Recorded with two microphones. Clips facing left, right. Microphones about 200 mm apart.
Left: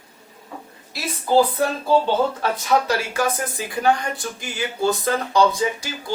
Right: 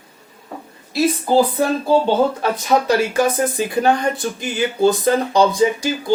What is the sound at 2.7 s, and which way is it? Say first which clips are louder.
Speech: right 5 dB; 20° right (ahead or behind).